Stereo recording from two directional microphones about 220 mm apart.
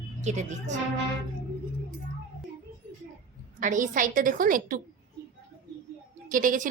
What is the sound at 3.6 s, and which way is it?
A woman's voice, 35° right (ahead or behind).